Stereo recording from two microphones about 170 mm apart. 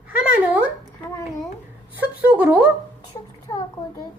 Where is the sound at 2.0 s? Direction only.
10° right (ahead or behind).